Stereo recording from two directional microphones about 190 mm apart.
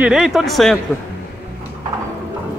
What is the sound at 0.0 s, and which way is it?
Speech, 5° right (ahead or behind).